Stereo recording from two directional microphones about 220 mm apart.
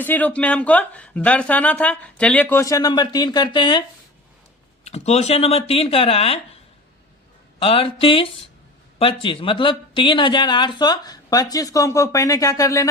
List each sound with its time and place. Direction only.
0.0 s a woman's voice: 5° left (ahead or behind); by 6.4 s 25° left (ahead or behind)
7.6 s speech: 25° left (ahead or behind)